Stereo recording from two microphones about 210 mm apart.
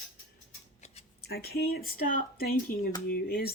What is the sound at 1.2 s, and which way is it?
Speech, 50° left (ahead or behind).